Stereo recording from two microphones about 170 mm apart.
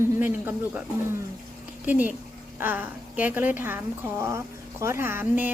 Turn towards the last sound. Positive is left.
turn(degrees=-10)  # may be behind; listen again after turning